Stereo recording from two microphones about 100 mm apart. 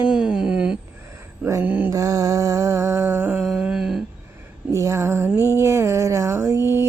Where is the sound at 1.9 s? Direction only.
35° right (ahead or behind).